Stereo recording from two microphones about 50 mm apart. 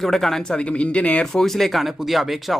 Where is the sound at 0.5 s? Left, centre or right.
Left.